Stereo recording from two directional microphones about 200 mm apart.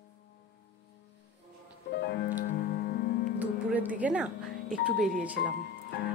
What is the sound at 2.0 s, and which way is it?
Music, 55° left (ahead or behind).